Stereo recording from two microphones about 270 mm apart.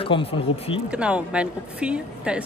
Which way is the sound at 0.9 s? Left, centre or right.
Centre.